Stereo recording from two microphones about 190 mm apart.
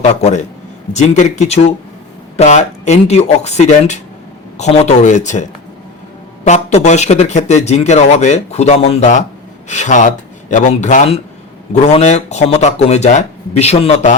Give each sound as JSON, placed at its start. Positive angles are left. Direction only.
{"t": 0.0, "sound": "speech", "side_deg": 35}